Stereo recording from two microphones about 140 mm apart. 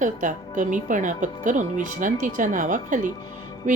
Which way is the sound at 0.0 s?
65° right (ahead or behind).